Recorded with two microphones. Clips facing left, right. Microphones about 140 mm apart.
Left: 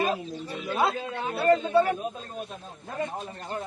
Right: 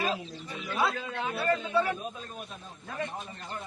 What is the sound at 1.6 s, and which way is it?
Speech, 55° left (ahead or behind).